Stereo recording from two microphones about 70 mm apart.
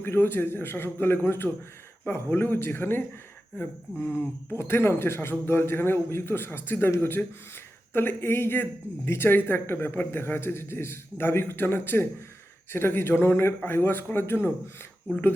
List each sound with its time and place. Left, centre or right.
0.0 s speech: left